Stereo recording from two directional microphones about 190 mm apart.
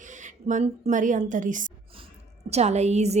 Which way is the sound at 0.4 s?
40° right (ahead or behind).